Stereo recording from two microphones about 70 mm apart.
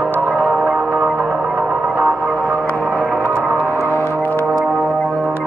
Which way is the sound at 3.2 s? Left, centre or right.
Right.